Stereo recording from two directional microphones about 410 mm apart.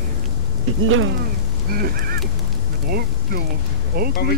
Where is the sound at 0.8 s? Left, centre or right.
Right.